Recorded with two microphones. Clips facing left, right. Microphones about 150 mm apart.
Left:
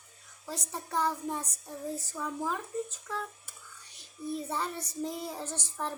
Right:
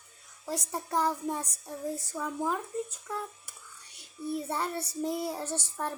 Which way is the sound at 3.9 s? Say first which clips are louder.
Right 2 dB; 10° right (ahead or behind).